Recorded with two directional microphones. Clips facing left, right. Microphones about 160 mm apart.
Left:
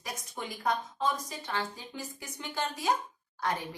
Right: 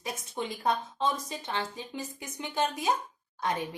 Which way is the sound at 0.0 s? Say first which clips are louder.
Right 4 dB; 25° right (ahead or behind).